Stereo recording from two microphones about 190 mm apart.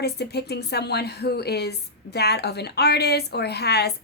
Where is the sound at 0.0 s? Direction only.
60° left (ahead or behind).